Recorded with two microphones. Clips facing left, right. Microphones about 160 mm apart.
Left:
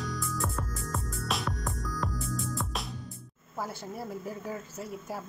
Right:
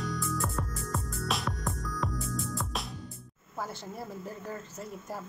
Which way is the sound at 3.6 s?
10° left (ahead or behind).